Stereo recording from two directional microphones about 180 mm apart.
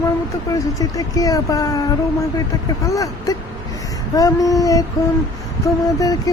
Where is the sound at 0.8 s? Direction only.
20° left (ahead or behind).